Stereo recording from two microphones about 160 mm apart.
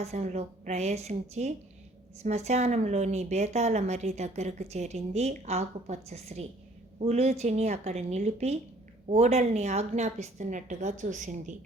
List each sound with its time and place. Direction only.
0.0 s a woman's voice: 45° right (ahead or behind)